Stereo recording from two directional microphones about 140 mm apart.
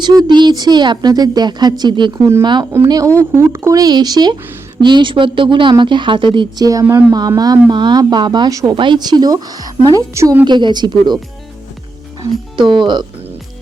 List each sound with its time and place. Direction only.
0.0 s a woman's voice: 30° right (ahead or behind)
12.5 s speech: 35° right (ahead or behind)